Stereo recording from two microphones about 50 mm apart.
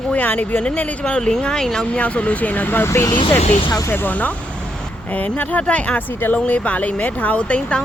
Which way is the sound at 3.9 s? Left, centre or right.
Left.